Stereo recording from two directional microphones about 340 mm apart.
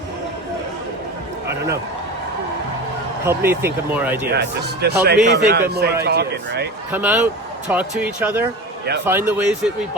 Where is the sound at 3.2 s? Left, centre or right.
Centre.